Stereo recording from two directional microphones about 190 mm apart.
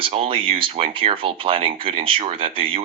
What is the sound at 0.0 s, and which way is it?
Speech, 30° right (ahead or behind).